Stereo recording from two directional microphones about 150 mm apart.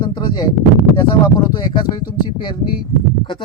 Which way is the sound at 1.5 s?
30° left (ahead or behind).